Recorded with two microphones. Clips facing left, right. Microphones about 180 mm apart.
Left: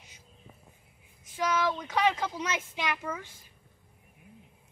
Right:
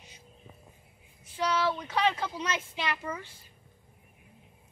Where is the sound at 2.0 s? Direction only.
10° left (ahead or behind).